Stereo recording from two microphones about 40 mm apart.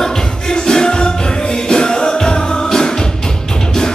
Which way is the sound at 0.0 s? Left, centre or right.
Centre.